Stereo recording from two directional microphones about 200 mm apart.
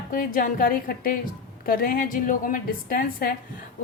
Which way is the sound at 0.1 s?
45° left (ahead or behind).